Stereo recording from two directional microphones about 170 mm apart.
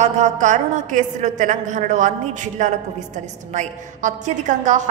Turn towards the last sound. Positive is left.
turn(degrees=-45)  # may be behind; listen again after turning